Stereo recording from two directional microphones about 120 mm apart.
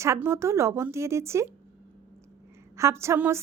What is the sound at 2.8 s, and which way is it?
Speech, 25° right (ahead or behind).